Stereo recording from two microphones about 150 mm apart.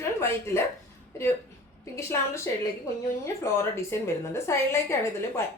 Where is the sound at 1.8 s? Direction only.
20° left (ahead or behind).